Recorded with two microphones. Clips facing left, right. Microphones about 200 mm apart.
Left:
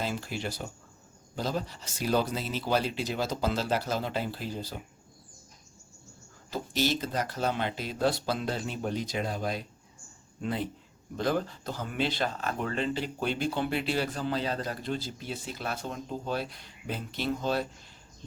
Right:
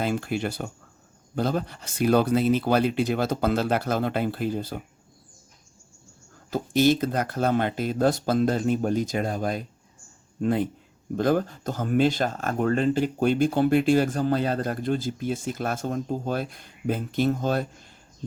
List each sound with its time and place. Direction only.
0.0 s speech: 55° right (ahead or behind)
6.5 s speech: 50° right (ahead or behind)